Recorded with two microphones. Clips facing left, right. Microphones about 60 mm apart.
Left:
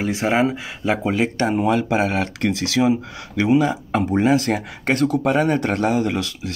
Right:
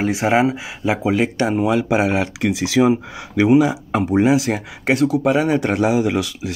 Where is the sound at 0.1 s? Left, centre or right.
Centre.